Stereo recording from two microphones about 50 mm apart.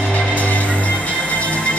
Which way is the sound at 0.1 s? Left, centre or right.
Left.